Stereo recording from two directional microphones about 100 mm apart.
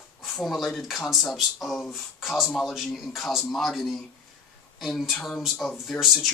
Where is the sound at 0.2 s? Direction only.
Centre (ahead or behind).